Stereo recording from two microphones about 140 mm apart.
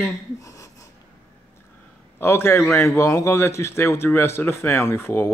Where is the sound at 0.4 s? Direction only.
25° left (ahead or behind).